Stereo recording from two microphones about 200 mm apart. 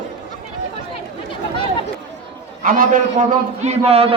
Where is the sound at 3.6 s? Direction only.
35° right (ahead or behind).